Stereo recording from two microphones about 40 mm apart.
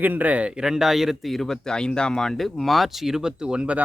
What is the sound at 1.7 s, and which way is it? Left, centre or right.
Speech, left.